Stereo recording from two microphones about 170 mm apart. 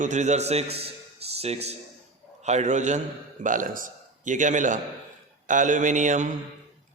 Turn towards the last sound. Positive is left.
turn(degrees=-45)  # may be behind; listen again after turning